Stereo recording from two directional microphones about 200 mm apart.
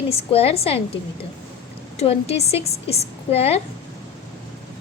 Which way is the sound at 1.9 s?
30° left (ahead or behind).